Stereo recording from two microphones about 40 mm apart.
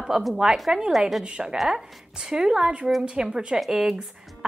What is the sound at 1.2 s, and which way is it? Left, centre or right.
A woman's voice, right.